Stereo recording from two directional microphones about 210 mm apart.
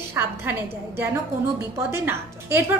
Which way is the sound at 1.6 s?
10° right (ahead or behind).